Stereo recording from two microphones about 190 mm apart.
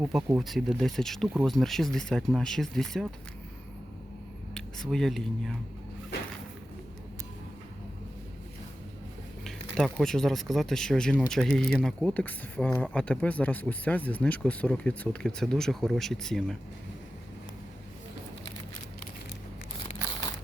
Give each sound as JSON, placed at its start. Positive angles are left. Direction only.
{"t": 0.0, "sound": "speech", "side_deg": -10}
{"t": 4.5, "sound": "speech", "side_deg": 0}
{"t": 9.4, "sound": "speech", "side_deg": 0}
{"t": 19.8, "sound": "crumpling", "side_deg": 30}